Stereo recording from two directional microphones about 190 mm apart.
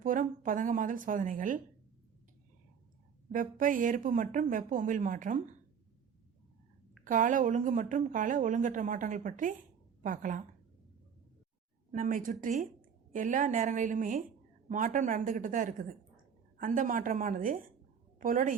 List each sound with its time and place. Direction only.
0.0 s speech: 45° right (ahead or behind)
3.3 s speech: 45° right (ahead or behind)
7.0 s speech: 45° right (ahead or behind)
11.9 s a woman's voice: 45° right (ahead or behind)